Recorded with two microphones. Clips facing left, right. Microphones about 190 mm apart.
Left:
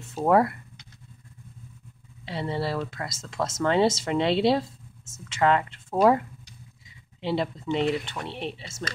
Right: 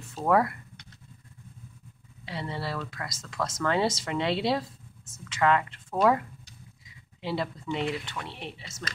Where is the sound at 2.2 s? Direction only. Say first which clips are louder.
Left 5 dB; 25° left (ahead or behind).